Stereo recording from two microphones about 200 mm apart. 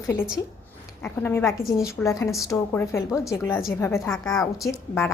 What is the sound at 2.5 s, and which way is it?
A woman's voice, 15° left (ahead or behind).